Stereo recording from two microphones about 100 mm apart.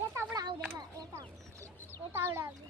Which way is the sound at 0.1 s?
25° right (ahead or behind).